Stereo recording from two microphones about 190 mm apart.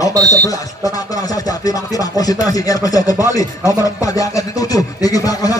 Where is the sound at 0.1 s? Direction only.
20° right (ahead or behind).